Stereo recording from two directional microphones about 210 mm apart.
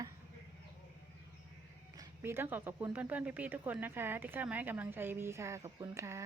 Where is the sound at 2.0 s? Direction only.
10° right (ahead or behind).